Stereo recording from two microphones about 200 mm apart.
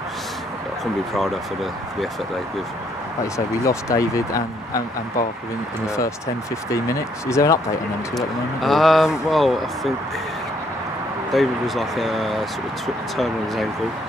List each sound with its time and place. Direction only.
1.1 s speech: centre (ahead or behind)
3.3 s speech: 15° left (ahead or behind)
5.9 s speech: 15° left (ahead or behind)
8.1 s speech: centre (ahead or behind)
11.3 s speech: centre (ahead or behind)